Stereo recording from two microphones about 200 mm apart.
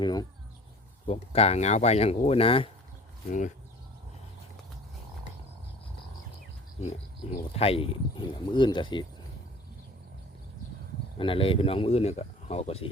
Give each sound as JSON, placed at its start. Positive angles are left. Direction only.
{"t": 0.0, "sound": "speech", "side_deg": 20}
{"t": 1.0, "sound": "speech", "side_deg": 30}
{"t": 3.2, "sound": "speech", "side_deg": 40}
{"t": 7.5, "sound": "speech", "side_deg": 30}
{"t": 11.2, "sound": "speech", "side_deg": 25}